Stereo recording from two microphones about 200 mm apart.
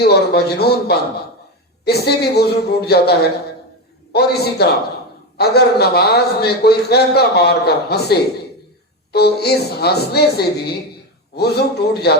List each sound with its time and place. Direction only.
0.1 s a man's voice: 55° left (ahead or behind)
9.1 s a man's voice: 55° left (ahead or behind)